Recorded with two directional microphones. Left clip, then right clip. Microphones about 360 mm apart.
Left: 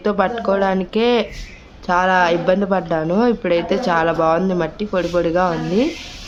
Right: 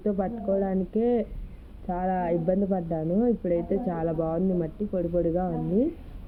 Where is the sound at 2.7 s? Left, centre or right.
Left.